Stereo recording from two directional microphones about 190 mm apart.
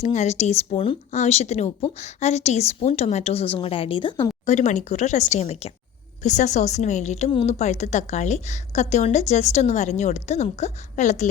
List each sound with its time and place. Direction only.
0.0 s a woman's voice: 35° left (ahead or behind)
4.4 s a woman's voice: 35° left (ahead or behind)